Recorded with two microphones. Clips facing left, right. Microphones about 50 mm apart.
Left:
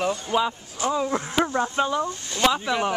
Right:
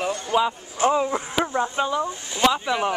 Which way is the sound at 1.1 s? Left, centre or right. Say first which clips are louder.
Left 1 dB; centre.